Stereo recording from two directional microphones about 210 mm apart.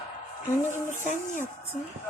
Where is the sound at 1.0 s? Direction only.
35° left (ahead or behind).